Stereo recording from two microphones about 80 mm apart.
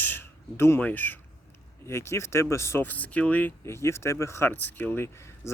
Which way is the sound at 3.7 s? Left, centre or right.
Left.